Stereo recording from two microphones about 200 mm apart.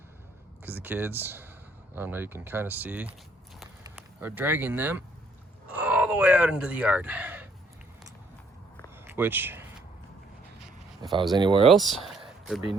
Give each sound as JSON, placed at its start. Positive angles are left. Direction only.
{"t": 0.6, "sound": "speech", "side_deg": -10}
{"t": 9.0, "sound": "a sound", "side_deg": -10}
{"t": 11.0, "sound": "speech", "side_deg": -20}
{"t": 11.7, "sound": "speech", "side_deg": 0}